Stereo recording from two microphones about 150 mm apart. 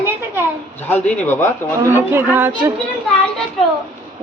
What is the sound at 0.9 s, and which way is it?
Speech, 15° left (ahead or behind).